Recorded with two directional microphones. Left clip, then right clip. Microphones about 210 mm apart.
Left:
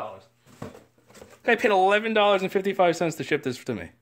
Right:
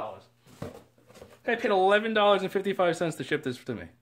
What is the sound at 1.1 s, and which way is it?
Speech, 40° left (ahead or behind).